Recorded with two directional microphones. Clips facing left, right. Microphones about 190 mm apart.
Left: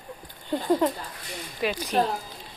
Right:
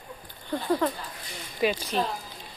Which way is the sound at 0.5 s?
20° left (ahead or behind).